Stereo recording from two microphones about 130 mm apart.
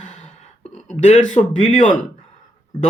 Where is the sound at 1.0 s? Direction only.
65° left (ahead or behind).